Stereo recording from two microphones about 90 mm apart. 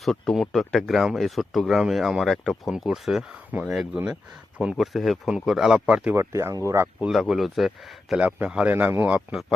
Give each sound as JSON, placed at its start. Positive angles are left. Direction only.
{"t": 0.0, "sound": "speech", "side_deg": 0}
{"t": 4.8, "sound": "speech", "side_deg": 0}
{"t": 6.1, "sound": "speech", "side_deg": -35}
{"t": 7.1, "sound": "speech", "side_deg": -5}
{"t": 8.6, "sound": "speech", "side_deg": -20}